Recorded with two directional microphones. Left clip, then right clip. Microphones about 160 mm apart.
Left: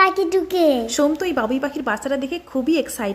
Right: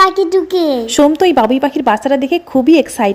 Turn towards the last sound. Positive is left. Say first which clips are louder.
# right 11 dB
turn(degrees=-20)  # may be behind; listen again after turning